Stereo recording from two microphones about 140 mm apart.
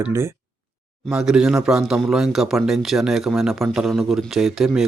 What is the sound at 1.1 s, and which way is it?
A man's voice, 5° right (ahead or behind).